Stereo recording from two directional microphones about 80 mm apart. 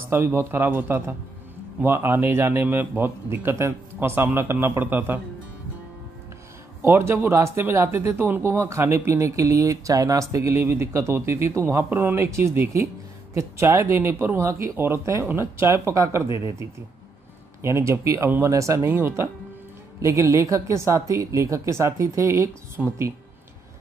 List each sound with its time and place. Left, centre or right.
0.1 s speech: right
6.8 s speech: right
18.9 s speech: right
20.0 s speech: right
22.8 s speech: centre